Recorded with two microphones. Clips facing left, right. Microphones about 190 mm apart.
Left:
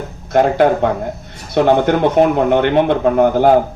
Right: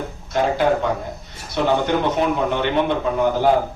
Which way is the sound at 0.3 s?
60° left (ahead or behind).